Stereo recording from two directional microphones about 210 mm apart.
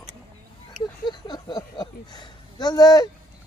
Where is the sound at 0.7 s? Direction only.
20° left (ahead or behind).